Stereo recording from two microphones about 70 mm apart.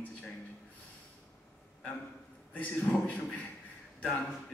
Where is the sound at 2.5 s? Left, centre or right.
Left.